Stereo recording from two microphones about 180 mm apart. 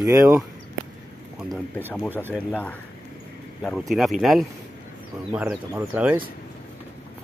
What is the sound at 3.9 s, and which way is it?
Speech, centre (ahead or behind).